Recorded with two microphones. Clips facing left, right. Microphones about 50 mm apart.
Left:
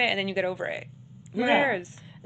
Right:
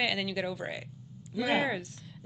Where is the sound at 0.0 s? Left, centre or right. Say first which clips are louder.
Left 5 dB; centre.